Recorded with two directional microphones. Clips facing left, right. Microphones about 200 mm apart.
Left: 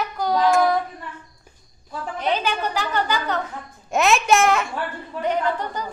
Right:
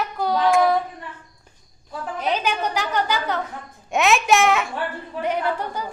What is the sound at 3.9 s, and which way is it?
A woman's voice, centre (ahead or behind).